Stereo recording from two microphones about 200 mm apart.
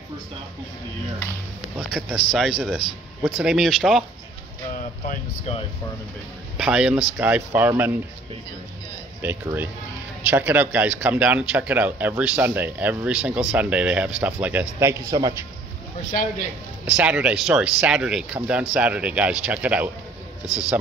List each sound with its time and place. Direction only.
1.9 s speech: centre (ahead or behind)
5.0 s speech: 40° left (ahead or behind)
6.6 s speech: 5° right (ahead or behind)
9.2 s speech: 10° right (ahead or behind)
16.8 s speech: 5° right (ahead or behind)